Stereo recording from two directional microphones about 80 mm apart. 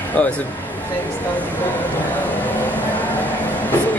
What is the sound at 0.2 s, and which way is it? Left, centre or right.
Speech, centre.